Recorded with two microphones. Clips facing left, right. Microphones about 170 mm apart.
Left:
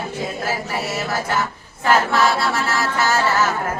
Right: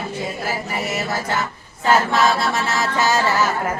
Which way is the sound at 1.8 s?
20° right (ahead or behind).